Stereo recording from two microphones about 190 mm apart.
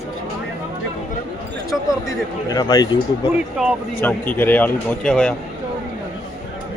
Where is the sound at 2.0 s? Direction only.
20° left (ahead or behind).